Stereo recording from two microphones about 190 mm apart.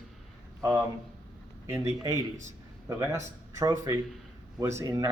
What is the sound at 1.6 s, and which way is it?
Speech, 15° right (ahead or behind).